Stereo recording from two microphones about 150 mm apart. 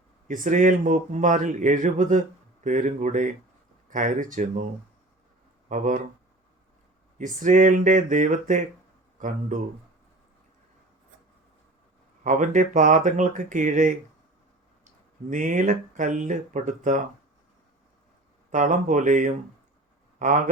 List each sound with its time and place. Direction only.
0.3 s speech: 60° right (ahead or behind)
7.2 s a man's voice: 60° right (ahead or behind)
12.2 s speech: 60° right (ahead or behind)
18.5 s speech: 55° right (ahead or behind)